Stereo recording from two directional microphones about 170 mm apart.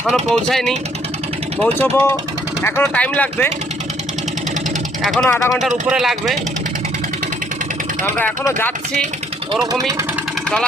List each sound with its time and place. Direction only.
0.0 s speech: centre (ahead or behind)
5.0 s speech: centre (ahead or behind)
8.0 s speech: 10° left (ahead or behind)
9.7 s speech: 20° right (ahead or behind)